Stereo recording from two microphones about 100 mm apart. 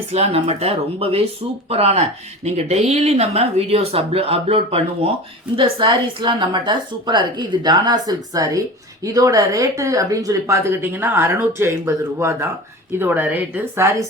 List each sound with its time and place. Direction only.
0.1 s speech: 90° right
5.5 s speech: 55° right (ahead or behind); by 13.9 s 20° right (ahead or behind)